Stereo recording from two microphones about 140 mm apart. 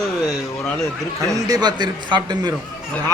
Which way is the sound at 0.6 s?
5° left (ahead or behind).